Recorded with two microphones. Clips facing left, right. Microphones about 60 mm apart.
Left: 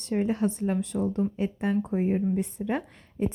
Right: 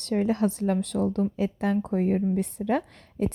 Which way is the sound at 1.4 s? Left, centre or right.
Right.